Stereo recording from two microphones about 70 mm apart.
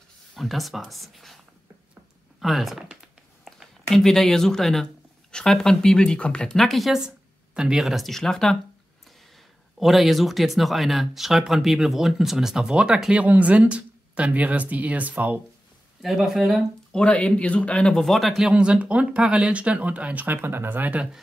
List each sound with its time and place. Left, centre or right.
0.4 s speech: centre
2.4 s speech: centre
9.8 s speech: centre; by 15.4 s right
16.0 s speech: centre
16.9 s speech: centre
18.4 s speech: centre